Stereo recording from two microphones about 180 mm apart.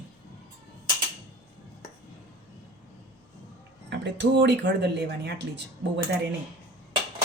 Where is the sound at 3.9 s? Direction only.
75° right (ahead or behind).